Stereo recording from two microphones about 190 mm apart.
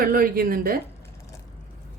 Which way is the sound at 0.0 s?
50° right (ahead or behind).